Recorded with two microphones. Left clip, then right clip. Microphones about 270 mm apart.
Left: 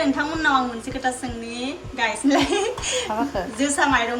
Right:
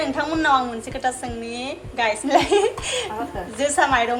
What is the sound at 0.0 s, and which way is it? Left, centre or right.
A woman's voice, centre.